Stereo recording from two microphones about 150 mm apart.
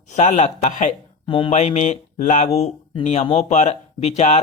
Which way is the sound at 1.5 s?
50° left (ahead or behind).